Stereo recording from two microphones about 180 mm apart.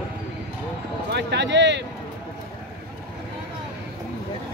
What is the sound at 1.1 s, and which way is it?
Speech, 70° right (ahead or behind).